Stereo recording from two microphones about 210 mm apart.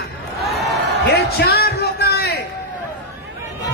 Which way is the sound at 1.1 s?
50° left (ahead or behind).